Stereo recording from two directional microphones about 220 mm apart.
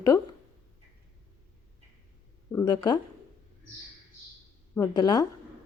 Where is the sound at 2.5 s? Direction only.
15° left (ahead or behind).